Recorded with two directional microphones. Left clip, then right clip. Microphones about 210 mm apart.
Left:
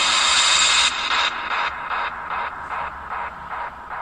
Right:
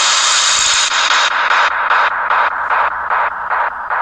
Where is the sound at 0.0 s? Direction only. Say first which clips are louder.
Right 5 dB; 45° right (ahead or behind).